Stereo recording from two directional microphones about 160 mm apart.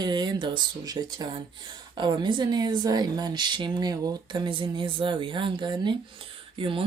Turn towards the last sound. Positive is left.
turn(degrees=-35)  # may be behind; listen again after turning